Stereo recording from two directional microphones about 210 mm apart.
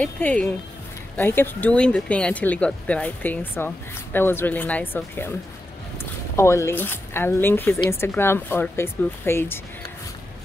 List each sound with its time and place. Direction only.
0.0 s speech: 5° left (ahead or behind)
6.3 s speech: 15° left (ahead or behind)